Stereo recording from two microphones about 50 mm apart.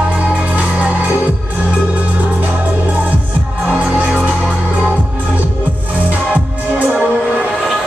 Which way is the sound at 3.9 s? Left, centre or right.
Right.